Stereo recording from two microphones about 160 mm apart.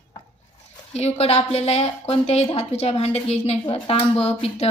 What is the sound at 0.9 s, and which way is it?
A woman's voice, 40° left (ahead or behind).